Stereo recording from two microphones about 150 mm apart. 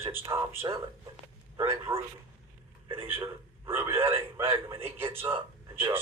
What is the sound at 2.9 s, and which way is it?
Speech, 35° right (ahead or behind).